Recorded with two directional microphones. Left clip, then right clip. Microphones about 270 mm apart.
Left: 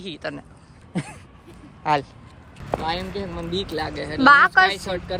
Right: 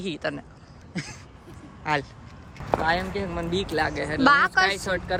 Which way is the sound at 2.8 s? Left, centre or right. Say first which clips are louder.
Right 2 dB; centre.